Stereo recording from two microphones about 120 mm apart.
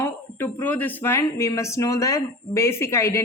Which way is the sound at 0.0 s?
15° left (ahead or behind).